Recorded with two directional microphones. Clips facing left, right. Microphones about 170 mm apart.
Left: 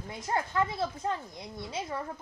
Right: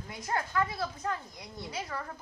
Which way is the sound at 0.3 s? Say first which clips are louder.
Left 2 dB; 25° left (ahead or behind).